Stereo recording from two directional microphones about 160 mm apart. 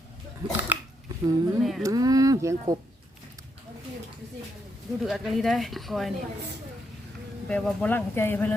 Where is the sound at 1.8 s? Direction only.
20° right (ahead or behind).